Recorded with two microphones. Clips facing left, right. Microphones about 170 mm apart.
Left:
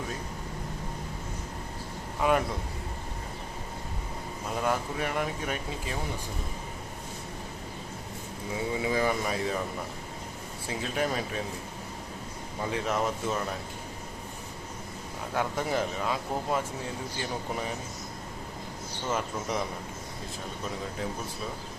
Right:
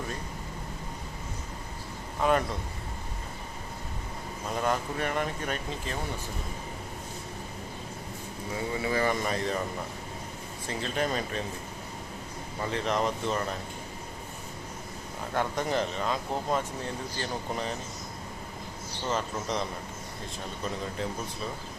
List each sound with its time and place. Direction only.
2.2 s speech: 10° left (ahead or behind)
4.5 s speech: 5° left (ahead or behind)
8.8 s speech: 10° left (ahead or behind)
10.7 s speech: 10° left (ahead or behind)
12.6 s speech: 10° left (ahead or behind)
15.3 s speech: 5° left (ahead or behind)
19.0 s speech: 10° left (ahead or behind)